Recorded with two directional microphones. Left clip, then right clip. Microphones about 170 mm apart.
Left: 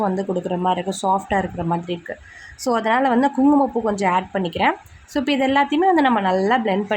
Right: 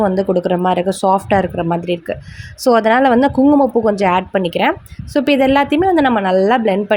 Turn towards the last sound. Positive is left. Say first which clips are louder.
# right 6 dB
turn(degrees=-30)  # may be behind; listen again after turning